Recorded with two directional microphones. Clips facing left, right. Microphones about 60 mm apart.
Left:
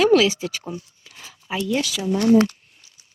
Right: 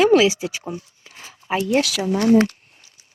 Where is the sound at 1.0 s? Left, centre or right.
Right.